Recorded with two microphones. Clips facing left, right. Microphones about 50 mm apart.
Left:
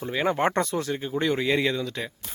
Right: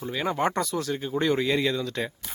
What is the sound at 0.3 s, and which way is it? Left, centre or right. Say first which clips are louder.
Speech: left 2 dB; left.